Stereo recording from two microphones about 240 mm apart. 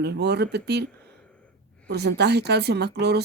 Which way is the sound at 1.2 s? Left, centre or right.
Centre.